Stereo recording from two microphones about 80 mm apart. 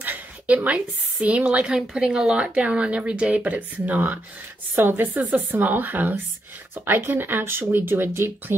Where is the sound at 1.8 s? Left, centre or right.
Centre.